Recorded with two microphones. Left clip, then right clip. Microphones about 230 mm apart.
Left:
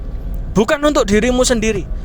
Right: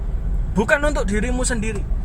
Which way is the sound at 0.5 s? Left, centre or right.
Left.